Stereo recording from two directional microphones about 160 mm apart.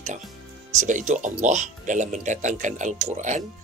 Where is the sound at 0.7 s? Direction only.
50° right (ahead or behind).